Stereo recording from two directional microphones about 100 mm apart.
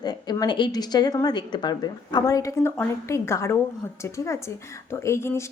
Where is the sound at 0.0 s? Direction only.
45° left (ahead or behind).